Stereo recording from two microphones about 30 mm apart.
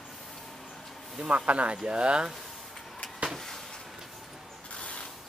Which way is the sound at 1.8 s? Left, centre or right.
Right.